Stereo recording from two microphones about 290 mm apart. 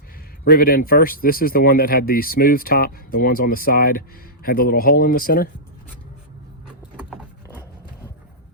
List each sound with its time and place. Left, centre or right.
0.5 s speech: left